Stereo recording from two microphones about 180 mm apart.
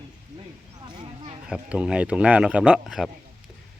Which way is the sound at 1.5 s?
5° right (ahead or behind).